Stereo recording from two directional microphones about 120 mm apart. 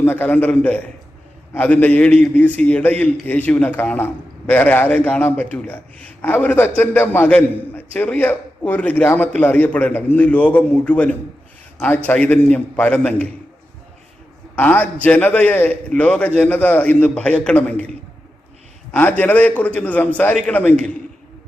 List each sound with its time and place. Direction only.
0.0 s a man's voice: 15° left (ahead or behind)
14.5 s a man's voice: 15° left (ahead or behind)
18.9 s a man's voice: 15° left (ahead or behind)